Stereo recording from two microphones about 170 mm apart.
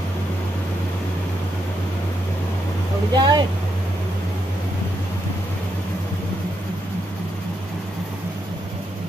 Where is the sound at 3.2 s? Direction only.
25° right (ahead or behind).